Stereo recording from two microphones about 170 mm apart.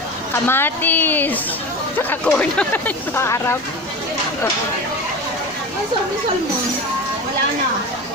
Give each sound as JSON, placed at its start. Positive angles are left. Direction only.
{"t": 0.5, "sound": "speech", "side_deg": 15}